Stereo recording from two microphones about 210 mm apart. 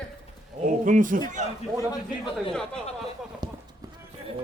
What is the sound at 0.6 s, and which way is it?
Speech, 35° right (ahead or behind).